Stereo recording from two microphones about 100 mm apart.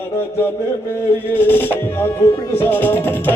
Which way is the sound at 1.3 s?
20° left (ahead or behind).